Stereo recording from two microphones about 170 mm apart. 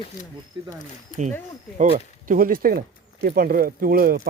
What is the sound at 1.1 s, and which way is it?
Speech, 50° left (ahead or behind).